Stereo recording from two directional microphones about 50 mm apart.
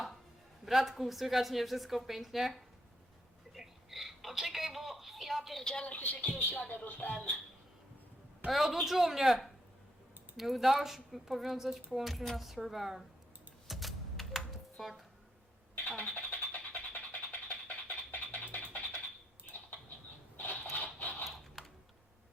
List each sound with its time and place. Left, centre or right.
0.6 s a woman's voice: centre
3.5 s telephone: centre
5.8 s speech: left
8.4 s a woman's voice: centre
13.7 s typing: centre
16.0 s a sound: left
19.5 s patter: left
20.3 s a sound: left